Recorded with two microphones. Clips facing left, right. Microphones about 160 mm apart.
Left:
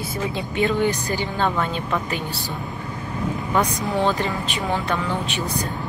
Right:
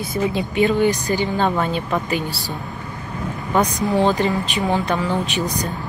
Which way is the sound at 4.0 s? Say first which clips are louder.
Right 4 dB; 20° right (ahead or behind).